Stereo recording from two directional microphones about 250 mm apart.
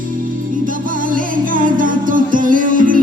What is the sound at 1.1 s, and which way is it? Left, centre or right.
Music, right.